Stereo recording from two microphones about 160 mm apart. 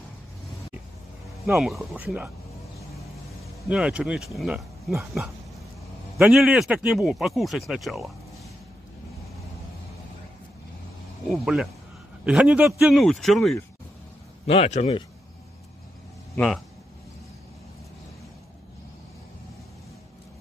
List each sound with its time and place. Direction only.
1.6 s speech: centre (ahead or behind)
3.6 s speech: 5° right (ahead or behind)
11.2 s speech: centre (ahead or behind)
14.4 s speech: 40° left (ahead or behind)
16.3 s speech: 5° left (ahead or behind)